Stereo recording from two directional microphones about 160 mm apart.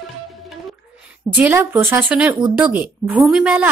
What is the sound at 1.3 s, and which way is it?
Speech, 10° right (ahead or behind).